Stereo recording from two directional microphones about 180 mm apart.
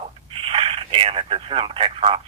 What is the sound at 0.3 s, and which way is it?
Speech, 30° right (ahead or behind).